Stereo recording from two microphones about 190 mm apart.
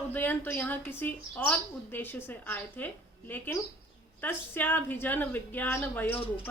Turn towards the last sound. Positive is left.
turn(degrees=30)  # may be behind; listen again after turning